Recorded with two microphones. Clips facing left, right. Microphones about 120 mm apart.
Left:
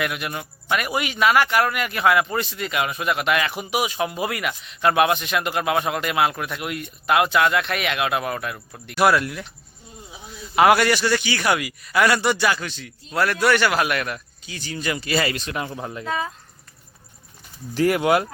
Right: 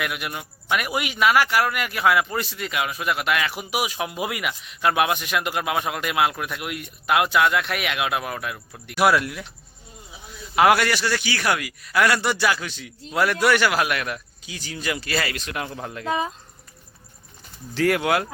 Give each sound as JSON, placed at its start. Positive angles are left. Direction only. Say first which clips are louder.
{"t": 0.0, "sound": "speech", "louder": "left 2 dB", "side_deg": -5}
{"t": 10.5, "sound": "speech", "louder": "left 2 dB", "side_deg": 0}
{"t": 16.0, "sound": "speech", "louder": "right 2 dB", "side_deg": -20}
{"t": 17.7, "sound": "speech", "louder": "left 2 dB", "side_deg": 10}